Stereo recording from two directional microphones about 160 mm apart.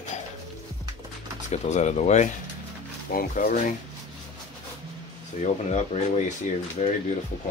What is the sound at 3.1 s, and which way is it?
Speech, 65° left (ahead or behind).